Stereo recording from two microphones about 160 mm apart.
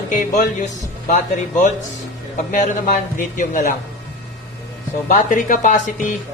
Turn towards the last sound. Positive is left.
turn(degrees=55)  # may be behind; listen again after turning